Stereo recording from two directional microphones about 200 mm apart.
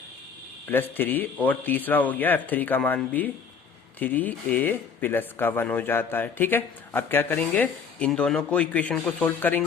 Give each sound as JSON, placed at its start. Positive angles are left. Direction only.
{"t": 0.7, "sound": "speech", "side_deg": 10}